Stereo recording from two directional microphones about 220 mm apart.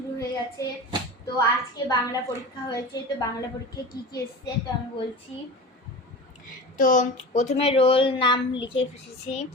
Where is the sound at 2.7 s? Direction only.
15° left (ahead or behind).